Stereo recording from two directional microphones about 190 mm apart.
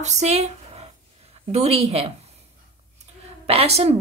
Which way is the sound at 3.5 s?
35° right (ahead or behind).